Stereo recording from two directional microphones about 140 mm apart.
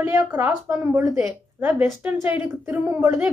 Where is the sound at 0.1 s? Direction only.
25° right (ahead or behind).